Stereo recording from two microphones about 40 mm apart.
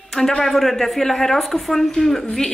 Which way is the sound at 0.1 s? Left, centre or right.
Centre.